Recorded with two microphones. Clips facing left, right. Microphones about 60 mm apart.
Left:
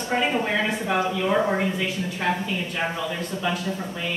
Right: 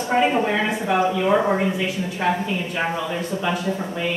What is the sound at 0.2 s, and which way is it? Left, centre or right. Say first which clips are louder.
A woman's voice: right 4 dB; centre.